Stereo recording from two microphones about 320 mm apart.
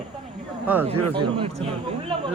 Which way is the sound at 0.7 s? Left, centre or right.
Centre.